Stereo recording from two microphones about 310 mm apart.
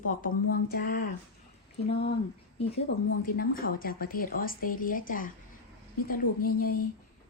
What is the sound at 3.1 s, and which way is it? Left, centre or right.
A woman's voice, left.